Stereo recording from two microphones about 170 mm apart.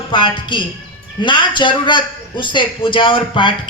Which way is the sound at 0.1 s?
30° left (ahead or behind).